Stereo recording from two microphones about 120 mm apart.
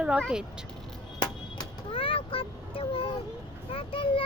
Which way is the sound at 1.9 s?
50° left (ahead or behind).